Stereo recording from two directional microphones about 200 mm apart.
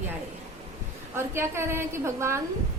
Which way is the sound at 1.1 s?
10° right (ahead or behind).